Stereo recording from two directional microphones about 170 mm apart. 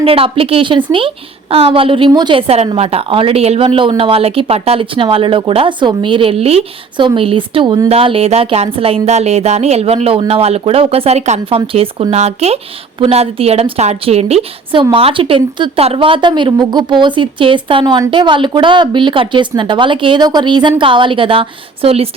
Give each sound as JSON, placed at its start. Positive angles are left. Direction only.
{"t": 0.0, "sound": "a woman's voice", "side_deg": -35}